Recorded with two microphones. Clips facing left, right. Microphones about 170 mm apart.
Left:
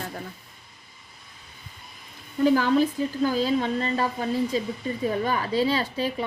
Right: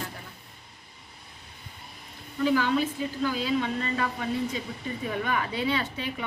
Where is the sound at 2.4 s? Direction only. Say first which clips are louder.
Left 5 dB; 45° left (ahead or behind).